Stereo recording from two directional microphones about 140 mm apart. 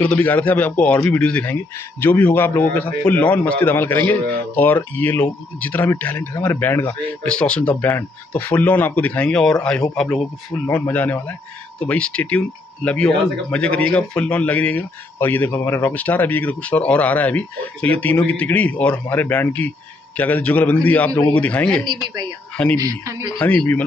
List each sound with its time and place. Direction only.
0.0 s speech: 10° left (ahead or behind)
22.8 s speech: 25° right (ahead or behind)
23.4 s speech: 10° left (ahead or behind)